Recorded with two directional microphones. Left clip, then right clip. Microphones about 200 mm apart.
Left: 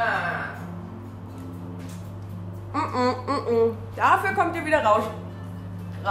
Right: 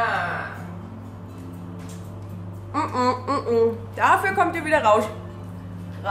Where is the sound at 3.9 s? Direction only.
15° right (ahead or behind).